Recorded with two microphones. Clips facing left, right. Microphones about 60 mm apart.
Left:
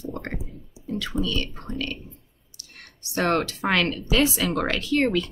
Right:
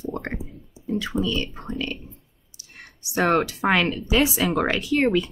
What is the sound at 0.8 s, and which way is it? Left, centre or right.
Speech, right.